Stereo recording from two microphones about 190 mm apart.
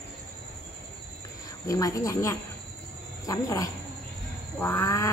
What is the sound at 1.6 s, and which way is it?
Speech, 20° left (ahead or behind).